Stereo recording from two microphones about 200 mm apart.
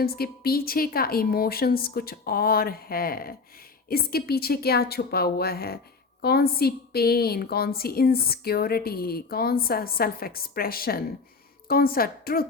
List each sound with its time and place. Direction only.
0.0 s a woman's voice: 50° left (ahead or behind)